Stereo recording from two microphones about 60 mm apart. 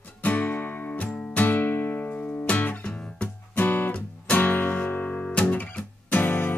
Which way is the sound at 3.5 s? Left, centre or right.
Left.